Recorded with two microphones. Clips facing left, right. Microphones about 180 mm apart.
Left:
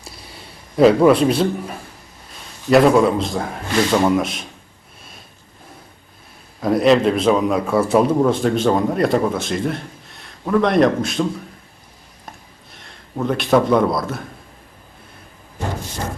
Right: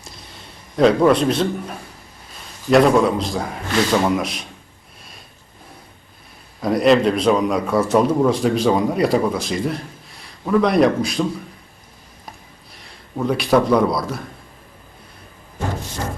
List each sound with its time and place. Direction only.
0.8 s a man's voice: 5° left (ahead or behind)
6.6 s a man's voice: centre (ahead or behind)
12.7 s a man's voice: centre (ahead or behind)